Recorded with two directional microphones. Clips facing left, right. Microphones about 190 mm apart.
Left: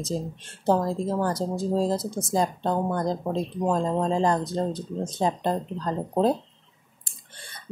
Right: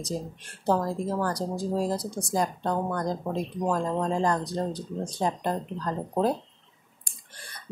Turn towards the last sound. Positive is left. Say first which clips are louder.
# left 3 dB
turn(degrees=25)  # may be behind; listen again after turning